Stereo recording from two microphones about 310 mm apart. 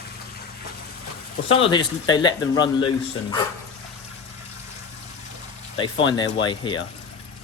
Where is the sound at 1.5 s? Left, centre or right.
Centre.